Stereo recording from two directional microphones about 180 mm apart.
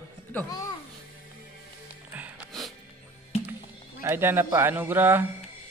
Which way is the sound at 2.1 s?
10° right (ahead or behind).